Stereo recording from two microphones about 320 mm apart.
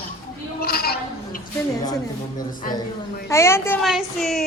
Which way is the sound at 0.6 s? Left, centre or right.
Left.